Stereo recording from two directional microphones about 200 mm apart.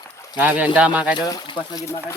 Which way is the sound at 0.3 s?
10° right (ahead or behind).